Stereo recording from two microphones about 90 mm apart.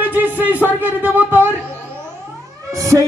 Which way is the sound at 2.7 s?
35° right (ahead or behind).